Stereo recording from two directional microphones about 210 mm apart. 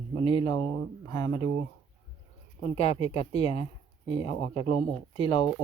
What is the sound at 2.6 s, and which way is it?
Speech, 30° left (ahead or behind).